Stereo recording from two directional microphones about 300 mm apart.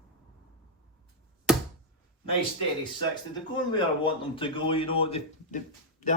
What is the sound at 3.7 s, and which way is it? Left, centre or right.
A man's voice, centre.